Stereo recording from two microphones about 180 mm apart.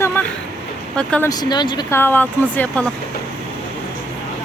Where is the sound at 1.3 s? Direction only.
25° left (ahead or behind).